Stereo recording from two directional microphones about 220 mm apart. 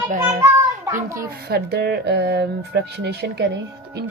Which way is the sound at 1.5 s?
45° right (ahead or behind).